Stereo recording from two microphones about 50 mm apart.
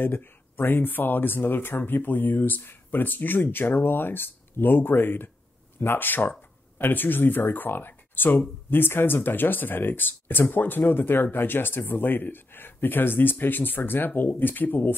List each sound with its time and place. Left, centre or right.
0.0 s speech: left